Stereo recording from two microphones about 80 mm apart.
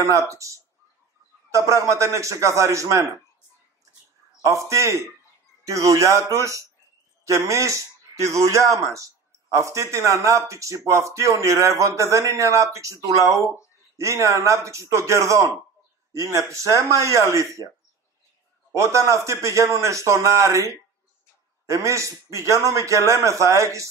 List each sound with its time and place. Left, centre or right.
0.3 s a man's voice: right
4.5 s a man's voice: right
18.7 s a man's voice: right